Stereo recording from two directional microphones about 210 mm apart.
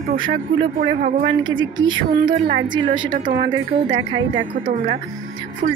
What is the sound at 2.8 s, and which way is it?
Speech, 65° right (ahead or behind).